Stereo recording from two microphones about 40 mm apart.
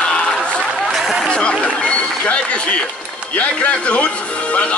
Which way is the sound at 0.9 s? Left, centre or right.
Centre.